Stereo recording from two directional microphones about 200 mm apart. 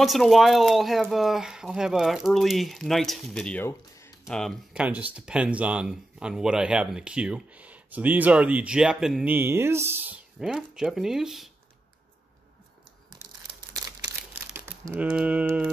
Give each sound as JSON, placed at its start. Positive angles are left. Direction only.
{"t": 0.0, "sound": "speech", "side_deg": 0}
{"t": 4.4, "sound": "speech", "side_deg": 0}
{"t": 13.5, "sound": "a sound", "side_deg": -20}
{"t": 14.5, "sound": "speech", "side_deg": -10}